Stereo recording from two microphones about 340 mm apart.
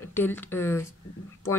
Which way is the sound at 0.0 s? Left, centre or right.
Centre.